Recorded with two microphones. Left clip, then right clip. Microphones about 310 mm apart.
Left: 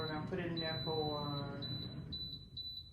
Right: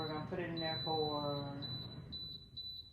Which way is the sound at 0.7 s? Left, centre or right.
Right.